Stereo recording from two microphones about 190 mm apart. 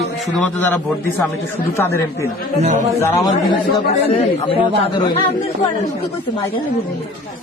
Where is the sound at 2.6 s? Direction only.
35° right (ahead or behind).